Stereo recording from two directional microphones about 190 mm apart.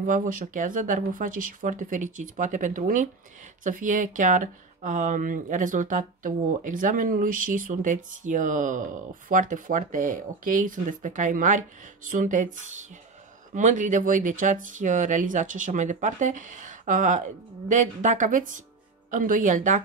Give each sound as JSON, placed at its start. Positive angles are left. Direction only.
{"t": 0.0, "sound": "speech", "side_deg": -45}